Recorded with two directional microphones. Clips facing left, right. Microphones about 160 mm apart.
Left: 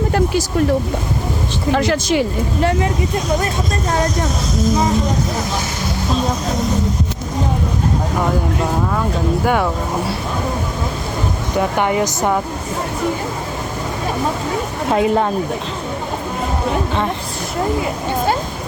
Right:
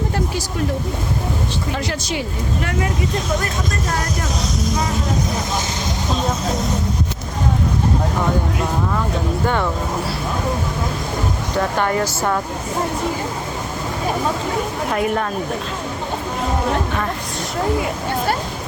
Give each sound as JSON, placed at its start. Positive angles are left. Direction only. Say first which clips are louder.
{"t": 2.6, "sound": "speech", "louder": "left 6 dB", "side_deg": 30}
{"t": 11.5, "sound": "speech", "louder": "left 3 dB", "side_deg": 15}
{"t": 14.9, "sound": "speech", "louder": "left 5 dB", "side_deg": 25}